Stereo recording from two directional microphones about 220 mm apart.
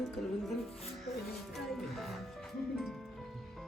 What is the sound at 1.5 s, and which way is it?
Music, centre (ahead or behind).